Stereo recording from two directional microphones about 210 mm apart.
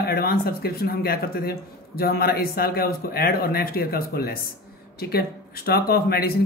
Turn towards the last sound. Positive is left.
turn(degrees=45)  # may be behind; listen again after turning